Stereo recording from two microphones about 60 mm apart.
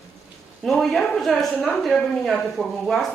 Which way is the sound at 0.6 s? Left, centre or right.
Centre.